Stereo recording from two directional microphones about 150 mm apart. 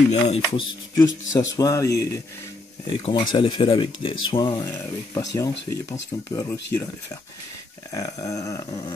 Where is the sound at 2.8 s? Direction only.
35° left (ahead or behind).